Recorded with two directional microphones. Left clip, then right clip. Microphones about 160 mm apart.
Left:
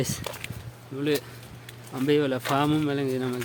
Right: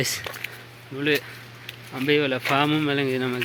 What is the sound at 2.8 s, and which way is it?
Speech, centre (ahead or behind).